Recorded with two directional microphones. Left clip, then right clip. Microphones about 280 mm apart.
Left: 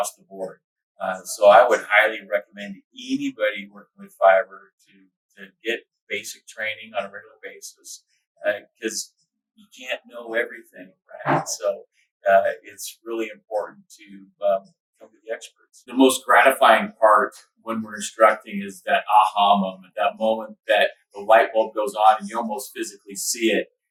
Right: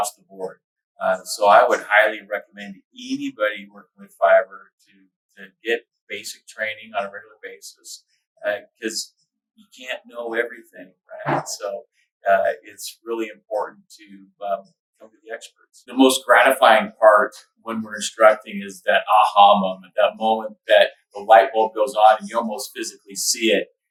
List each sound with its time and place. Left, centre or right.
0.0 s speech: centre